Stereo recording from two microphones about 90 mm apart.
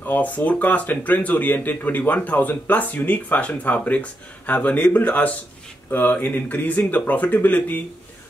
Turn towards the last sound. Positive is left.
turn(degrees=20)  # may be behind; listen again after turning